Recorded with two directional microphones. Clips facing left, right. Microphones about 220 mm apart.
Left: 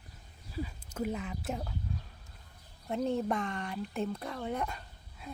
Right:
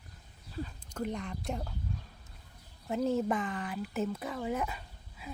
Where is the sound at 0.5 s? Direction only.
10° left (ahead or behind).